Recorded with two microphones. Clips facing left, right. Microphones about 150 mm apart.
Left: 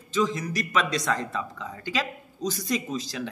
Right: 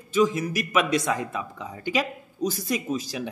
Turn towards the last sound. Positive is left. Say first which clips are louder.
# right 2 dB
turn(degrees=-10)  # may be behind; listen again after turning